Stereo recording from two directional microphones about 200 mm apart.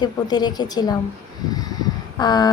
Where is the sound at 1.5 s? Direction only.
20° left (ahead or behind).